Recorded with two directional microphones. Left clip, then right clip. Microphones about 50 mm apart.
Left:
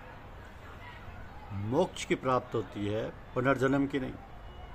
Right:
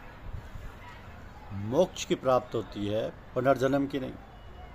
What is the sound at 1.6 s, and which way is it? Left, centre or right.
A man's voice, centre.